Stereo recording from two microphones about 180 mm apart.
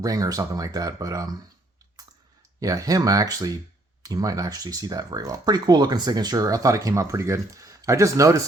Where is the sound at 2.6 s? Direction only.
20° right (ahead or behind).